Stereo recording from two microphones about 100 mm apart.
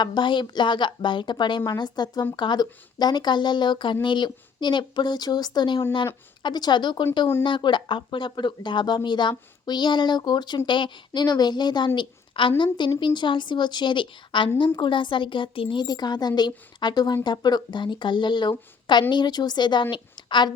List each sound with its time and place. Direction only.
0.0 s a woman's voice: 50° left (ahead or behind)
11.9 s a woman's voice: 55° left (ahead or behind)